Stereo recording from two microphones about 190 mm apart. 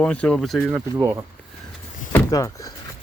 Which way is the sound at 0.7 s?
15° right (ahead or behind).